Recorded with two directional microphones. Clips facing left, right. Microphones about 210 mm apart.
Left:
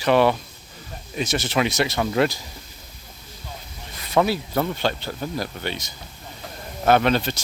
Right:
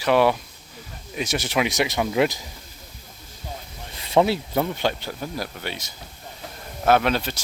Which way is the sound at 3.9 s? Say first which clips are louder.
Right 1 dB; 25° right (ahead or behind).